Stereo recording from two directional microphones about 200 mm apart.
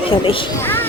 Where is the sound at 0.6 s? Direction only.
10° left (ahead or behind).